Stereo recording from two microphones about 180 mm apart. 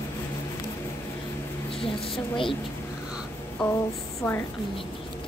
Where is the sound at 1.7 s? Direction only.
30° left (ahead or behind).